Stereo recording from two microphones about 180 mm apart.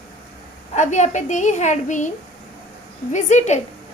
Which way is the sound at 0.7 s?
40° left (ahead or behind).